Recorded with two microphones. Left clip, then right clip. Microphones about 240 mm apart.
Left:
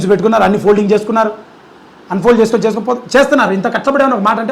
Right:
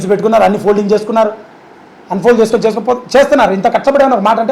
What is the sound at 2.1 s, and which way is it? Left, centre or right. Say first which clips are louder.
Speech: right 1 dB; left.